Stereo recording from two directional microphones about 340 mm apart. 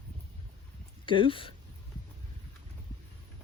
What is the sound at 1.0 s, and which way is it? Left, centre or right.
Speech, centre.